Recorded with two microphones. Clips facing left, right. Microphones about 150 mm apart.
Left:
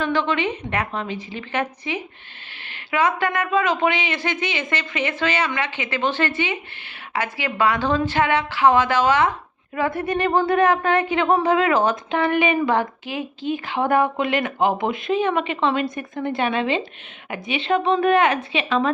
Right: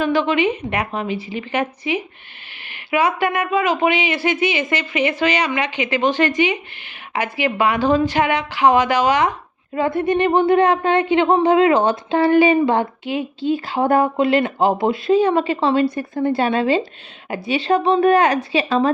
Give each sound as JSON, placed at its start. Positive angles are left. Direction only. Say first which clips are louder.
{"t": 0.0, "sound": "a woman's voice", "louder": "right 4 dB", "side_deg": -10}
{"t": 9.7, "sound": "speech", "louder": "right 5 dB", "side_deg": -25}